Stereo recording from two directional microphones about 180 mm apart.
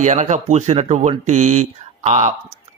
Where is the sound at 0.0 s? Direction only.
40° right (ahead or behind).